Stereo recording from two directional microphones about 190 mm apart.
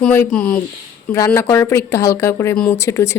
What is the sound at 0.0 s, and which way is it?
A woman's voice, 10° left (ahead or behind).